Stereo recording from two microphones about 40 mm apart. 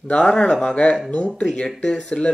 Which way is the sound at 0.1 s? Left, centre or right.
Left.